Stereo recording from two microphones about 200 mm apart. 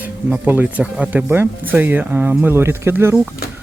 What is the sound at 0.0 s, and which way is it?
Speech, 10° right (ahead or behind).